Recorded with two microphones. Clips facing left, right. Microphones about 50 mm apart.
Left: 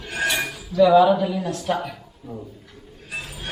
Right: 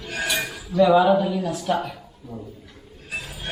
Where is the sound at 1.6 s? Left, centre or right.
Centre.